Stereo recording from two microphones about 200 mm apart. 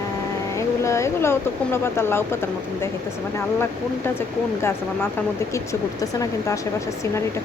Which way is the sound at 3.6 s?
10° left (ahead or behind).